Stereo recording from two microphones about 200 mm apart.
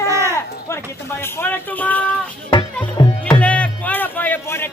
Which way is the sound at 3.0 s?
20° left (ahead or behind).